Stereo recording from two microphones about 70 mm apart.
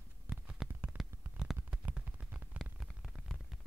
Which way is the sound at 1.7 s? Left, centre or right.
Centre.